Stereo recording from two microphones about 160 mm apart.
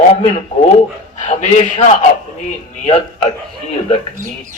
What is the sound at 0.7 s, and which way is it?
A man's voice, 45° left (ahead or behind).